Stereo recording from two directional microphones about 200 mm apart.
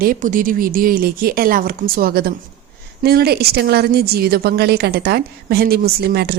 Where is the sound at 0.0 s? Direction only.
45° right (ahead or behind).